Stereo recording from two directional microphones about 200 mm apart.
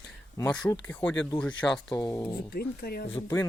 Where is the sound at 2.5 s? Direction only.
50° left (ahead or behind).